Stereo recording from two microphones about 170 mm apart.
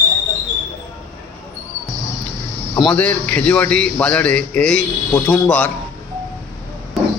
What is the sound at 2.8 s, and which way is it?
A man's voice, 5° left (ahead or behind).